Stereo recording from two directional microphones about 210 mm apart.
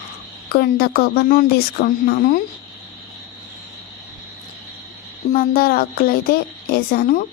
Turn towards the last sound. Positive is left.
turn(degrees=45)  # may be behind; listen again after turning